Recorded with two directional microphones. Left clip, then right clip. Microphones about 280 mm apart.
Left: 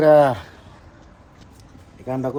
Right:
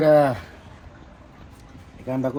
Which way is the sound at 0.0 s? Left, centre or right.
Centre.